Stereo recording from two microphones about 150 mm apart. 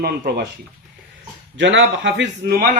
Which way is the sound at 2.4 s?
90° right.